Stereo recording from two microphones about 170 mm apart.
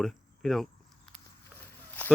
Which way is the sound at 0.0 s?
Centre (ahead or behind).